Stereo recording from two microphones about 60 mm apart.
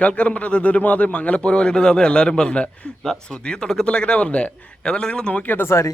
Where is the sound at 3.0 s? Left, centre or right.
Centre.